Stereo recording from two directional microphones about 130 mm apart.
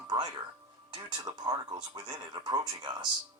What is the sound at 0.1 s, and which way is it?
Speech, 30° right (ahead or behind).